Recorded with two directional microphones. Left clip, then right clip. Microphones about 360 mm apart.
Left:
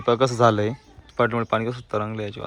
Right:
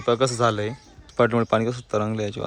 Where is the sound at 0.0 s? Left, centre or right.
Centre.